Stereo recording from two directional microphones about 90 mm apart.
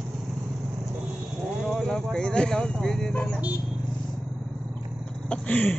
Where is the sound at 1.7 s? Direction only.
5° left (ahead or behind).